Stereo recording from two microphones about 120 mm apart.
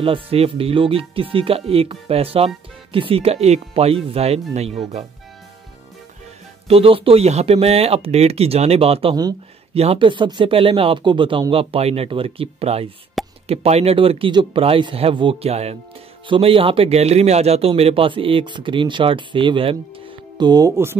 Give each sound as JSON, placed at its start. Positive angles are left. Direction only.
{"t": 0.0, "sound": "speech", "side_deg": -50}
{"t": 6.7, "sound": "speech", "side_deg": -50}
{"t": 13.2, "sound": "plop", "side_deg": 0}
{"t": 13.5, "sound": "speech", "side_deg": -60}
{"t": 16.3, "sound": "speech", "side_deg": -50}
{"t": 20.3, "sound": "speech", "side_deg": -35}